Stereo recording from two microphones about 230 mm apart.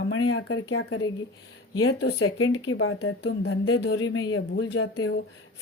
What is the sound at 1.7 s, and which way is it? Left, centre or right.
Speech, left.